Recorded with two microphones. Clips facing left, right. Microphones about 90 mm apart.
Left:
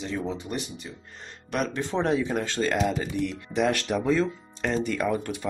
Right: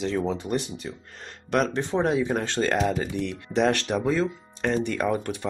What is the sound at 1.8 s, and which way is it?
Speech, 20° right (ahead or behind).